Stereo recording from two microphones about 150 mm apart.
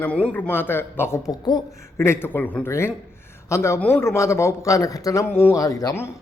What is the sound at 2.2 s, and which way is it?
A man's voice, 10° left (ahead or behind).